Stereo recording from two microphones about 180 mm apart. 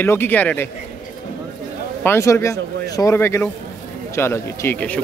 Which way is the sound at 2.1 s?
15° left (ahead or behind).